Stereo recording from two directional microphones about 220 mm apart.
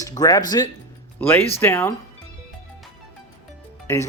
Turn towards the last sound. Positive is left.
turn(degrees=10)  # may be behind; listen again after turning